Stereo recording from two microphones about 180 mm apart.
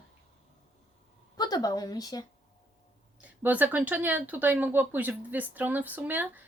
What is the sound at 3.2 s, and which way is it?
Speech, 10° right (ahead or behind).